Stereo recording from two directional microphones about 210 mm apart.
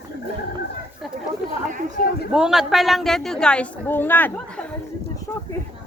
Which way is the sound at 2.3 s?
Centre (ahead or behind).